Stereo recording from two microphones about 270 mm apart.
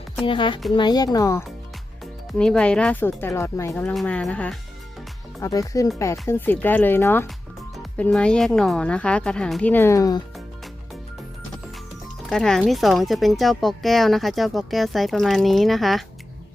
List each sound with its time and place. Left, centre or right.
0.2 s speech: centre
12.3 s speech: centre